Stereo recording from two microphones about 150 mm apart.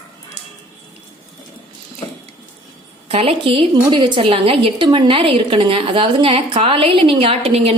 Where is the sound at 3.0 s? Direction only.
40° right (ahead or behind).